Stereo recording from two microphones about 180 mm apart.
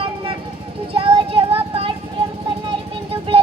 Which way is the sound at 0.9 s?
30° right (ahead or behind).